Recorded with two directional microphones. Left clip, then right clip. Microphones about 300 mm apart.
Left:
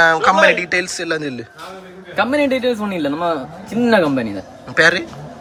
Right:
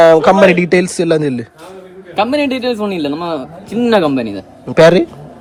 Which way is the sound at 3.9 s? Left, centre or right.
Centre.